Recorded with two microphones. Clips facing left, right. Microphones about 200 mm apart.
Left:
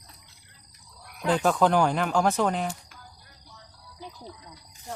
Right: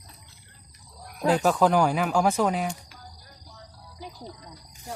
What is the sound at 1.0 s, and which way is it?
Cricket, 40° right (ahead or behind).